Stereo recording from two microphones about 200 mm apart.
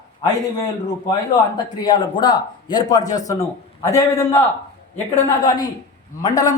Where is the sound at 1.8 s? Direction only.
20° left (ahead or behind).